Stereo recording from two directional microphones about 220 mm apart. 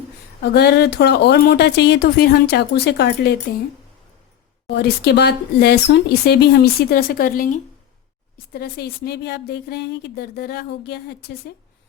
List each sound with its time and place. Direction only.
0.5 s speech: 50° left (ahead or behind)
4.7 s speech: 50° left (ahead or behind)
8.5 s speech: 45° left (ahead or behind)